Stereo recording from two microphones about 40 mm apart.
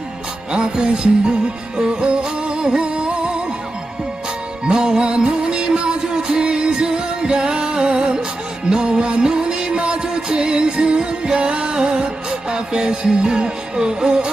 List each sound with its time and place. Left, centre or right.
0.5 s music: right
4.6 s music: centre